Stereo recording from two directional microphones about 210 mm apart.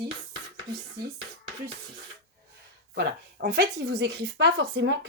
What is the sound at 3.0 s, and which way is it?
Speech, 50° right (ahead or behind).